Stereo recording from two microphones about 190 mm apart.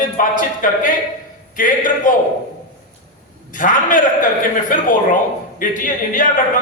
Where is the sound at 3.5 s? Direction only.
45° left (ahead or behind).